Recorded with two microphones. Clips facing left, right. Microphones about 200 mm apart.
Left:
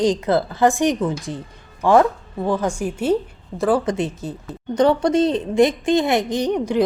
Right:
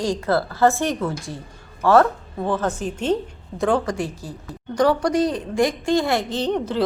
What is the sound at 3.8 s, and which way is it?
Speech, 20° left (ahead or behind).